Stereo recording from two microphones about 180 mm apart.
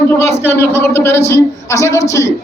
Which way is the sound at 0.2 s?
15° left (ahead or behind).